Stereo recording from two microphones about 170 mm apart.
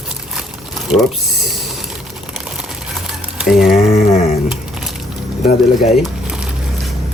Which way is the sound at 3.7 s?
40° left (ahead or behind).